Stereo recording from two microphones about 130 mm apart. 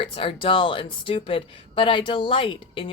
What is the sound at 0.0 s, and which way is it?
Speech, 45° left (ahead or behind).